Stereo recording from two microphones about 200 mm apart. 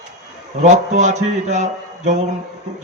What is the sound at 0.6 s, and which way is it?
A man's voice, 35° right (ahead or behind).